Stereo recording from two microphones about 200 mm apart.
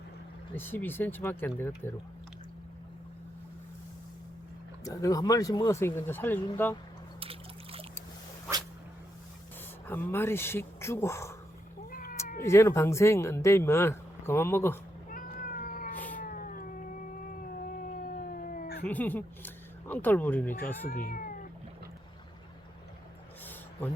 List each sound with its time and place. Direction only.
0.5 s speech: 10° left (ahead or behind)
4.8 s speech: 15° left (ahead or behind)
7.2 s trickle: 30° right (ahead or behind)
9.8 s speech: 10° left (ahead or behind)
11.9 s cat: 45° left (ahead or behind)
12.4 s speech: 15° left (ahead or behind)
15.1 s cat: 45° left (ahead or behind)
18.9 s speech: 10° left (ahead or behind)
20.9 s speech: 45° left (ahead or behind)